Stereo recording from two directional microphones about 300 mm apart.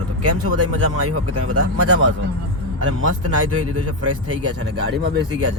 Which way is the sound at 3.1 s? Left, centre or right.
Right.